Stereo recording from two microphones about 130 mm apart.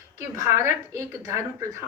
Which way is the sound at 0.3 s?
25° right (ahead or behind).